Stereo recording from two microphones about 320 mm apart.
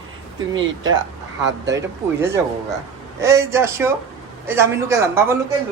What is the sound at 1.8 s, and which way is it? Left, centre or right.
Speech, centre.